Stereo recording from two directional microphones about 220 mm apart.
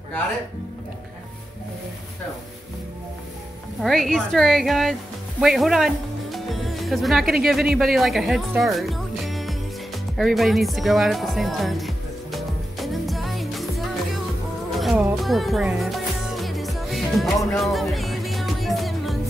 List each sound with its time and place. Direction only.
3.8 s a woman's voice: centre (ahead or behind)
10.1 s music: centre (ahead or behind)